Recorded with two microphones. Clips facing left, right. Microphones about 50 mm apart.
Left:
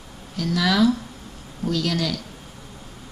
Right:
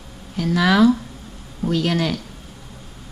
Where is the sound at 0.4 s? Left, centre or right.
Right.